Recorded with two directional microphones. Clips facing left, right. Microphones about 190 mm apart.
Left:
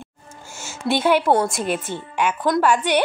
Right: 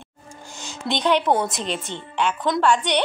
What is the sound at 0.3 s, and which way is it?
Music, 15° right (ahead or behind).